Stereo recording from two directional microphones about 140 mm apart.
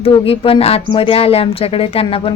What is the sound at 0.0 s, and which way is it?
A woman's voice, 45° left (ahead or behind).